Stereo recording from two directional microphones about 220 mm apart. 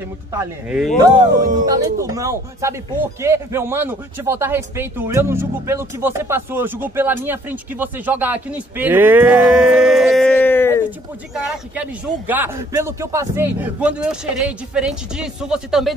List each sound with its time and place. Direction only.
0.3 s speech: 15° right (ahead or behind)
1.1 s speech: 35° right (ahead or behind)
1.7 s speech: 15° right (ahead or behind); by 10.8 s 10° left (ahead or behind)
11.3 s a man's voice: 5° right (ahead or behind)